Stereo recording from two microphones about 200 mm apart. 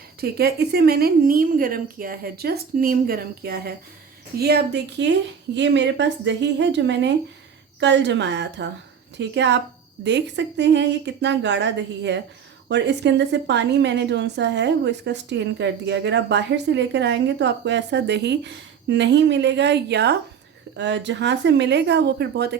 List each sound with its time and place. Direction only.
0.2 s a woman's voice: 50° right (ahead or behind)